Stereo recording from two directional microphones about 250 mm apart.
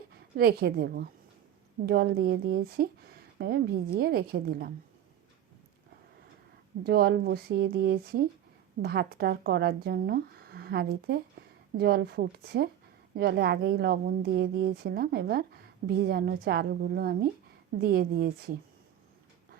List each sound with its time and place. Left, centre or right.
0.3 s speech: right
6.8 s speech: right